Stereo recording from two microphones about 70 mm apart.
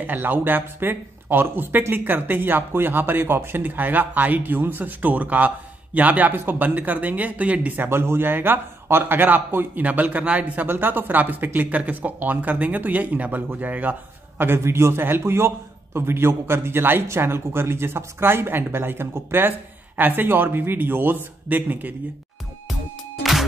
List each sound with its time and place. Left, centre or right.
0.0 s speech: right
14.4 s a man's voice: right